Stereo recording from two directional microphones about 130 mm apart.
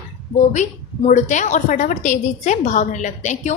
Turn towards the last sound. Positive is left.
turn(degrees=70)  # may be behind; listen again after turning